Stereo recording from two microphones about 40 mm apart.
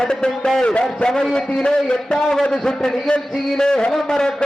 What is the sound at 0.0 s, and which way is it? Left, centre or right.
Speech, centre.